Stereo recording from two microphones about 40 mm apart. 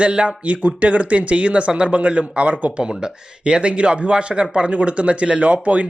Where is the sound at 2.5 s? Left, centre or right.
Right.